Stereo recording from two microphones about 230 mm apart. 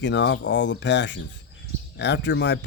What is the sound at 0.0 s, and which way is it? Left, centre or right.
Speech, left.